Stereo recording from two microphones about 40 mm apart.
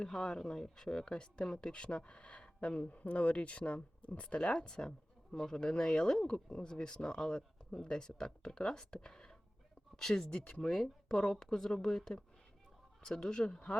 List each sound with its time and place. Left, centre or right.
0.0 s speech: centre
13.0 s speech: left